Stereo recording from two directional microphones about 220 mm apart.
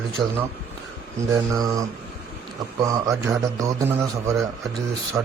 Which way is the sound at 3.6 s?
15° right (ahead or behind).